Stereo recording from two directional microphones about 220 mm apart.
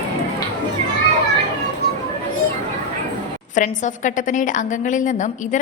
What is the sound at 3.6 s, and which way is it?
A woman's voice, 35° left (ahead or behind).